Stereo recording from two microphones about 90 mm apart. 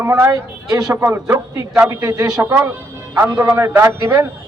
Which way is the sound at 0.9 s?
25° right (ahead or behind).